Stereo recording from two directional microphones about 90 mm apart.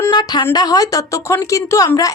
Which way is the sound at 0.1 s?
50° left (ahead or behind).